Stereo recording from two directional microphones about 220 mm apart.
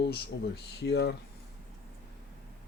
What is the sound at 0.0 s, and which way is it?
Speech, 50° left (ahead or behind).